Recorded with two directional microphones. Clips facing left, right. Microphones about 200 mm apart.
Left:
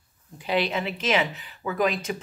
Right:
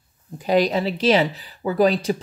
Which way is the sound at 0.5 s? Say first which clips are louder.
Right 7 dB; 40° right (ahead or behind).